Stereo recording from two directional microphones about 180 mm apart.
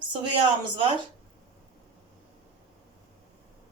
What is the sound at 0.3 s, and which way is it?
Speech, 30° right (ahead or behind).